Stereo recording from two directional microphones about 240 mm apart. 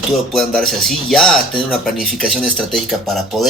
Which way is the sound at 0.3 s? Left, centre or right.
Centre.